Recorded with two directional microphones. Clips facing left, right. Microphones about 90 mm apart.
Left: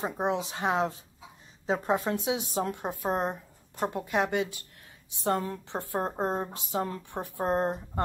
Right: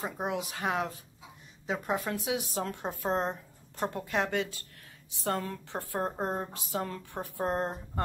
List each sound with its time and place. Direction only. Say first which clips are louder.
0.0 s a woman's voice: left 4 dB; 25° left (ahead or behind)